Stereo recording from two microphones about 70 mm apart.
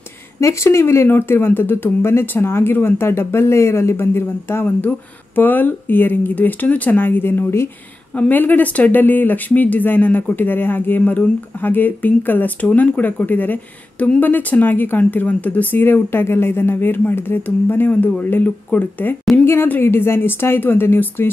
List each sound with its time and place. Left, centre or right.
0.4 s speech: left